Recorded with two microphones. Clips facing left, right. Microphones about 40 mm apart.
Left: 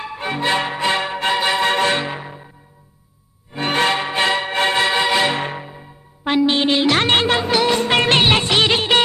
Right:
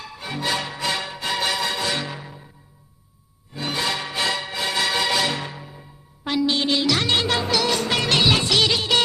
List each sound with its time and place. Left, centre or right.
0.0 s music: left
1.6 s music: left
3.5 s music: left